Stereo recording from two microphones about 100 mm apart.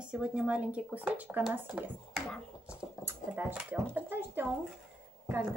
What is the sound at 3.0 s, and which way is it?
Speech, 20° right (ahead or behind).